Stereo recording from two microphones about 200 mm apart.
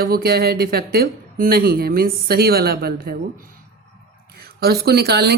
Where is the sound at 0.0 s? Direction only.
50° right (ahead or behind).